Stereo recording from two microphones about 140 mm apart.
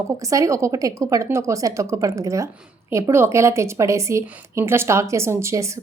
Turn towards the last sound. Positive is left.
turn(degrees=-20)  # may be behind; listen again after turning